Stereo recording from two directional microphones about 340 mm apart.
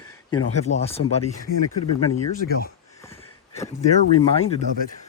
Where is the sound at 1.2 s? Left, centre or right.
Left.